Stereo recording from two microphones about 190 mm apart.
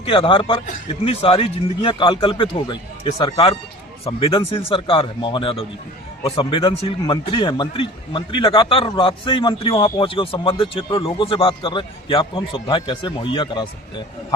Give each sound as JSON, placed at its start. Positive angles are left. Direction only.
{"t": 0.0, "sound": "a man's voice", "side_deg": 25}